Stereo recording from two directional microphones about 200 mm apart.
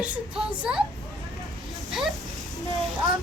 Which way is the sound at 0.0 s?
5° right (ahead or behind).